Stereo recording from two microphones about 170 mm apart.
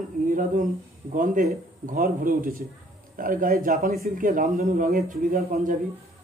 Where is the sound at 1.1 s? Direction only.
50° right (ahead or behind).